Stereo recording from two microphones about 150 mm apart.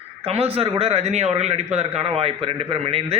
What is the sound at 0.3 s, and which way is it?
A man's voice, 40° right (ahead or behind).